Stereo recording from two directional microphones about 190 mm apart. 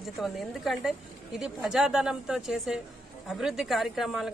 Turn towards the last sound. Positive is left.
turn(degrees=0)  # may be behind; listen again after turning